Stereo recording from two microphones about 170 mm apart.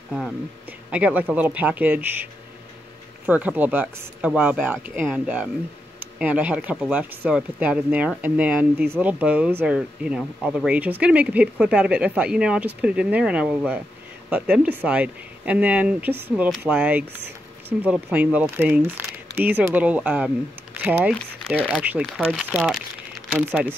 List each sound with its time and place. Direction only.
0.1 s speech: 5° right (ahead or behind)
3.3 s speech: 10° right (ahead or behind)